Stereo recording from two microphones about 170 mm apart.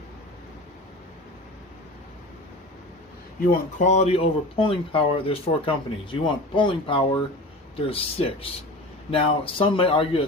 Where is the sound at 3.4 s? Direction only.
50° left (ahead or behind).